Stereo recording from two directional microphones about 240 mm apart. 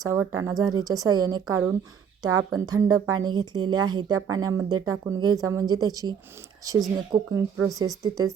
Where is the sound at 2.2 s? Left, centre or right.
Right.